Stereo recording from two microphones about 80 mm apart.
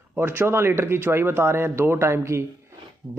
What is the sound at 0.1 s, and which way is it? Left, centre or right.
A man's voice, right.